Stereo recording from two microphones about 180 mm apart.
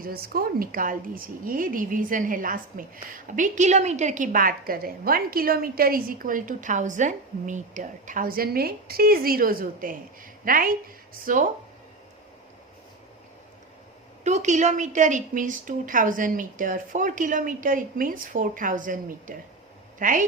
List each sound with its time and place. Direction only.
0.0 s a woman's voice: 55° right (ahead or behind)
14.3 s a woman's voice: 40° right (ahead or behind)